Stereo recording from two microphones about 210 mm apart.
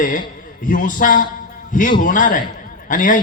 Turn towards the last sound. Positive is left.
turn(degrees=40)  # may be behind; listen again after turning